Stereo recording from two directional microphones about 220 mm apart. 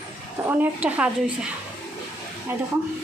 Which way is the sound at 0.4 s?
10° right (ahead or behind).